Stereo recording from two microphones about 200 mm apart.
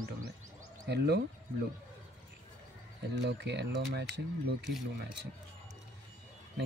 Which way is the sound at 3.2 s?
60° right (ahead or behind).